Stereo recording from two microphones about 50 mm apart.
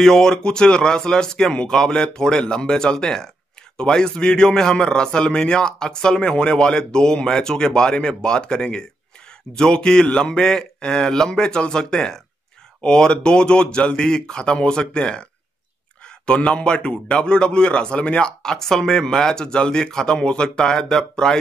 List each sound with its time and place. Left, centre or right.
0.0 s a man's voice: centre
16.3 s a man's voice: left